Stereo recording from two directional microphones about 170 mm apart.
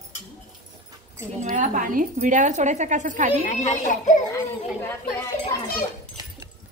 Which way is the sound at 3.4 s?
45° left (ahead or behind).